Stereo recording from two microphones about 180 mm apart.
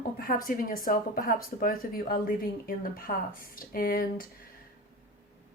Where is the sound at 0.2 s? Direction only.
50° left (ahead or behind).